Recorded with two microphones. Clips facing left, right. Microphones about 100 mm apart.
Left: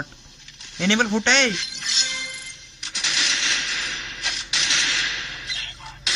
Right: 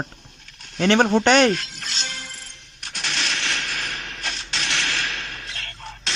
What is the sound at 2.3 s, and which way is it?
Coin, 50° right (ahead or behind).